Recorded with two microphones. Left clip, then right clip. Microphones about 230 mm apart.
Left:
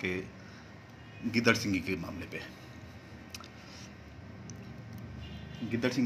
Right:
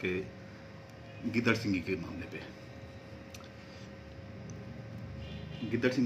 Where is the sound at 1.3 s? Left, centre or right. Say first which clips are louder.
Left 3 dB; left.